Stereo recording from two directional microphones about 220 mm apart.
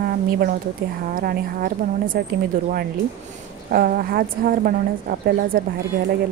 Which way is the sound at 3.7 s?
40° right (ahead or behind).